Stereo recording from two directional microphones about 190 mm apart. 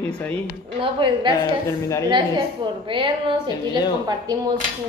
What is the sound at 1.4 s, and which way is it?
Speech, 15° left (ahead or behind).